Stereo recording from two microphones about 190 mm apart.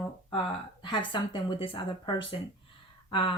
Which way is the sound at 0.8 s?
25° left (ahead or behind).